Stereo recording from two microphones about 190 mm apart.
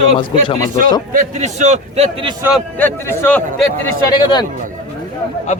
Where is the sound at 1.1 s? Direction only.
35° right (ahead or behind).